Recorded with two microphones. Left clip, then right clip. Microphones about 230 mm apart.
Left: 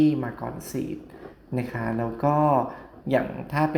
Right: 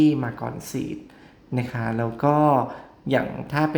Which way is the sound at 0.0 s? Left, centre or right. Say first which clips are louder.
Right 2 dB; centre.